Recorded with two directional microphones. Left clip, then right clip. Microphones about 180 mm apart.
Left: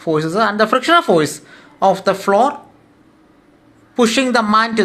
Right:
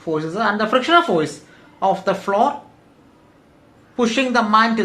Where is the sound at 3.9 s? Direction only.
40° left (ahead or behind).